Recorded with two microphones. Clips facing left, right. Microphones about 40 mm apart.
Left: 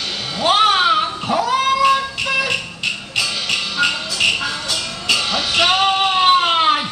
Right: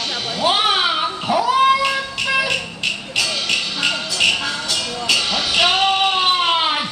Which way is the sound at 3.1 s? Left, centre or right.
Centre.